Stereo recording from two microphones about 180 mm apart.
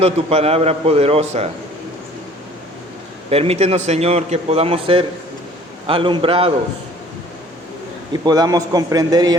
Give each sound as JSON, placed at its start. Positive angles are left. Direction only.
{"t": 0.0, "sound": "a man's voice", "side_deg": -35}
{"t": 3.2, "sound": "a man's voice", "side_deg": -35}
{"t": 8.1, "sound": "a man's voice", "side_deg": -20}